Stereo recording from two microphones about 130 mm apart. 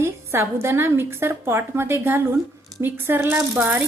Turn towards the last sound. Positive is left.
turn(degrees=-15)  # may be behind; listen again after turning